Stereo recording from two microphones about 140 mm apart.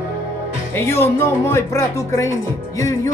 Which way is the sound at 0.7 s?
15° left (ahead or behind).